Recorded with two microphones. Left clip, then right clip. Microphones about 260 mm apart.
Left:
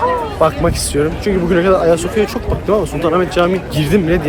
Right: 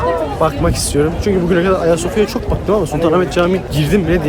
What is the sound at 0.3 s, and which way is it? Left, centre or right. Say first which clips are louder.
Speech: left 2 dB; centre.